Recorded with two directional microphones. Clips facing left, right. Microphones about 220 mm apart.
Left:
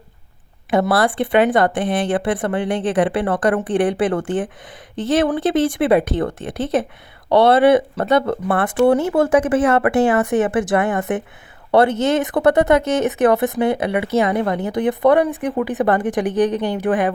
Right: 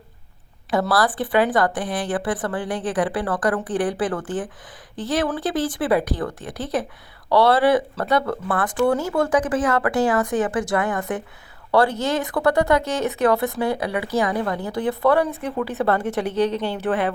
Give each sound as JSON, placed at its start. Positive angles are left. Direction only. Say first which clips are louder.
{"t": 0.7, "sound": "speech", "louder": "left 4 dB", "side_deg": 25}